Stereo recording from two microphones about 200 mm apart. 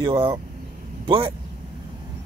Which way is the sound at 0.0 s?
20° right (ahead or behind).